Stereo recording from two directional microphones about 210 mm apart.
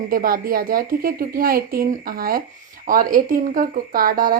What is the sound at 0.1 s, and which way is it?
A woman's voice, 45° right (ahead or behind).